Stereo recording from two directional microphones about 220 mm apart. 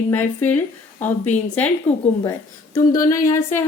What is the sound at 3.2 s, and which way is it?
Speech, 10° left (ahead or behind).